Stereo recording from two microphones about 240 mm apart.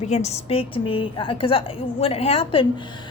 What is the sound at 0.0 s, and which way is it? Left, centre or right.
A woman's voice, left.